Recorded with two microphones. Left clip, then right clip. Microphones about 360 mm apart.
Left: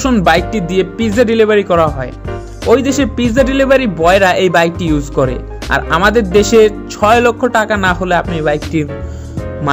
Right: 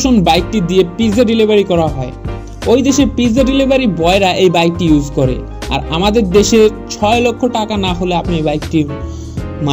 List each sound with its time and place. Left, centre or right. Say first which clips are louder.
0.1 s speech: left 3 dB; left